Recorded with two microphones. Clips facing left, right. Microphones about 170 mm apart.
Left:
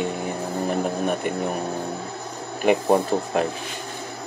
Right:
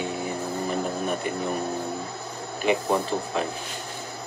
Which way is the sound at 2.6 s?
55° left (ahead or behind).